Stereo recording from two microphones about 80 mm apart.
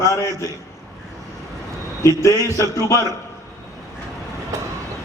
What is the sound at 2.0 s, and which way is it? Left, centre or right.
A man's voice, left.